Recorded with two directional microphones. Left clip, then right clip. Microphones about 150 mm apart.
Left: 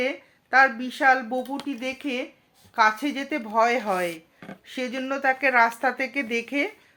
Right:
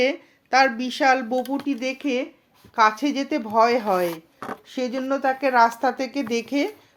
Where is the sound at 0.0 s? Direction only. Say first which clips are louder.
Right 5 dB; 55° right (ahead or behind).